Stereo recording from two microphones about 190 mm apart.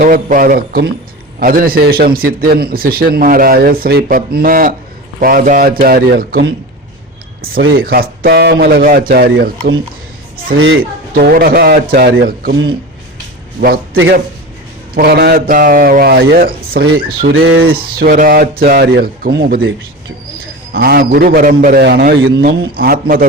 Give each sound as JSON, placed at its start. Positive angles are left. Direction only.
{"t": 0.0, "sound": "a man's voice", "side_deg": -45}
{"t": 7.4, "sound": "speech", "side_deg": -55}
{"t": 11.1, "sound": "a man's voice", "side_deg": -50}
{"t": 17.3, "sound": "speech", "side_deg": -90}
{"t": 17.7, "sound": "a man's voice", "side_deg": -50}